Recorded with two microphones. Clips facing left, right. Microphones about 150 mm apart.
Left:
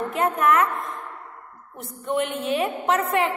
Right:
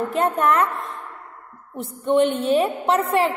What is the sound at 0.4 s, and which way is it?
Speech, 35° right (ahead or behind).